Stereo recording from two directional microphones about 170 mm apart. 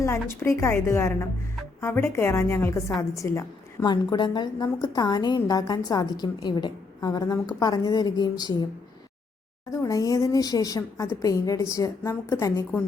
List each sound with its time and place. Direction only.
0.0 s a woman's voice: 15° left (ahead or behind)
9.8 s a woman's voice: 20° left (ahead or behind)